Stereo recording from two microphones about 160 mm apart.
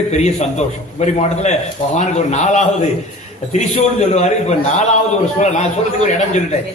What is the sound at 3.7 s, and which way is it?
A man's voice, 45° left (ahead or behind).